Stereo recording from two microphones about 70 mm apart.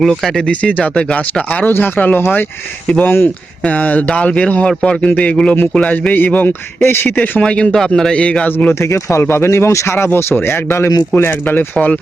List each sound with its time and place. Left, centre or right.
0.0 s speech: centre
0.6 s a man's voice: centre
3.7 s a man's voice: left
7.2 s speech: centre
8.4 s a man's voice: left
8.8 s a man's voice: left